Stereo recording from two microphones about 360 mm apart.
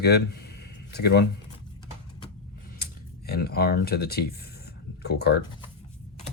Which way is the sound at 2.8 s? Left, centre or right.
Left.